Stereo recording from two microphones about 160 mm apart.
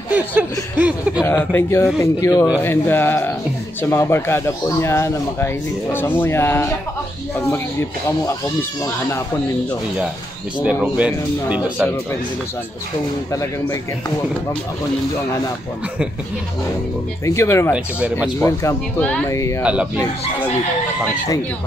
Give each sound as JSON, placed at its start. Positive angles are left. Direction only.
{"t": 0.1, "sound": "a man's voice", "side_deg": -10}
{"t": 1.2, "sound": "a man's voice", "side_deg": 15}
{"t": 10.6, "sound": "a man's voice", "side_deg": -5}
{"t": 13.3, "sound": "speech", "side_deg": 20}
{"t": 17.2, "sound": "a man's voice", "side_deg": 20}
{"t": 19.6, "sound": "a man's voice", "side_deg": -5}